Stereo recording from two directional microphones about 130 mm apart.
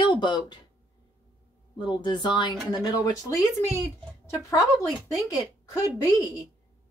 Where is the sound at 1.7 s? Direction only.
35° left (ahead or behind).